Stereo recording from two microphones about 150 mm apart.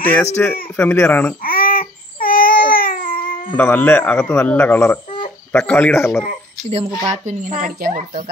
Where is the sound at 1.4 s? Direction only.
75° left (ahead or behind).